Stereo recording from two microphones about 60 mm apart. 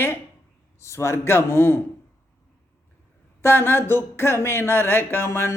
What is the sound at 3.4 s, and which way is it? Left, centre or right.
Speech, left.